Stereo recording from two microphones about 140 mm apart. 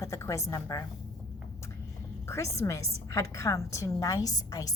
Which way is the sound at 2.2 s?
20° left (ahead or behind).